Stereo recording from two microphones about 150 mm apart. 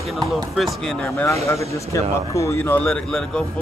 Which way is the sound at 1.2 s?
20° left (ahead or behind).